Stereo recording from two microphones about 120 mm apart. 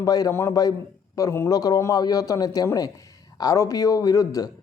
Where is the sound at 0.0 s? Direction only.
30° left (ahead or behind).